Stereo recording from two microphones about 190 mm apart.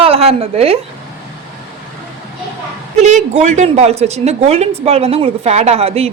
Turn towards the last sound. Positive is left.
turn(degrees=-30)  # may be behind; listen again after turning